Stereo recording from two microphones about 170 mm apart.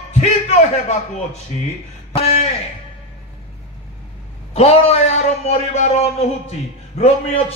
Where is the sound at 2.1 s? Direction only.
35° left (ahead or behind).